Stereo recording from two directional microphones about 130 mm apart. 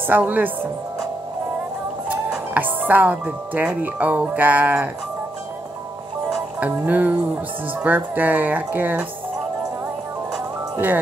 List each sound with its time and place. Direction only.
0.0 s speech: 15° right (ahead or behind)
2.0 s speech: 10° right (ahead or behind)
6.6 s speech: 10° right (ahead or behind)